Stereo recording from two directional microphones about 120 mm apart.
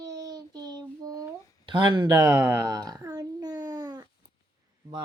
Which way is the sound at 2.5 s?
30° right (ahead or behind).